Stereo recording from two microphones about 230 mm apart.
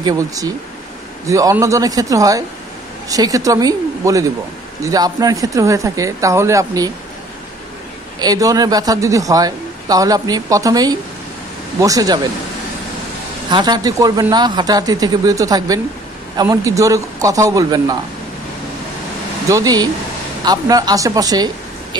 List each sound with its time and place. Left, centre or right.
0.0 s speech: centre
8.2 s speech: centre
13.5 s speech: centre
19.5 s speech: centre